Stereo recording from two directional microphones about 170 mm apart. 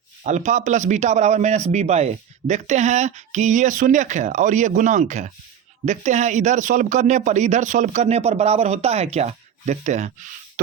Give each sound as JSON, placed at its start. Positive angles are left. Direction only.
{"t": 0.2, "sound": "a man's voice", "side_deg": -45}